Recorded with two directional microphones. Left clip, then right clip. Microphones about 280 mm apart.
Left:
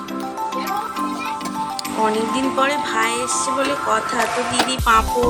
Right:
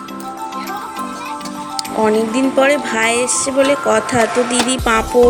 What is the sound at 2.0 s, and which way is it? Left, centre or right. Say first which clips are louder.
Music: right 4 dB; centre.